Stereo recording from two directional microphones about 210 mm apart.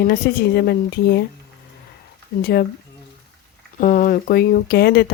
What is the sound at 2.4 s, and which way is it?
Speech, 45° left (ahead or behind).